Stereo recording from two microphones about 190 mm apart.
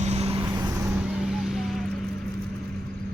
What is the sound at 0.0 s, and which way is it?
Vehicle, 35° right (ahead or behind).